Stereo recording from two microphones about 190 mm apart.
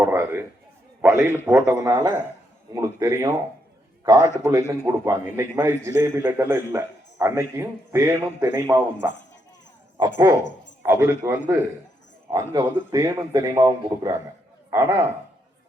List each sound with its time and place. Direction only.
0.0 s a man's voice: 10° right (ahead or behind)
10.3 s a man's voice: 15° right (ahead or behind)